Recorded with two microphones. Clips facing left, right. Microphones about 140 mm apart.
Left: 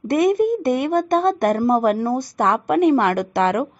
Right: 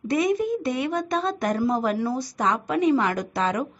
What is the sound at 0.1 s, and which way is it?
A woman's voice, 55° left (ahead or behind).